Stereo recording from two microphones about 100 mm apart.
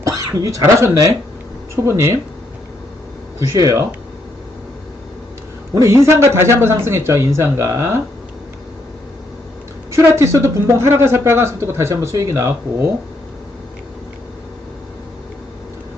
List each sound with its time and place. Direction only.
0.0 s speech: 30° right (ahead or behind)
3.3 s speech: 30° right (ahead or behind)
5.7 s speech: 30° right (ahead or behind)
9.9 s speech: 30° right (ahead or behind)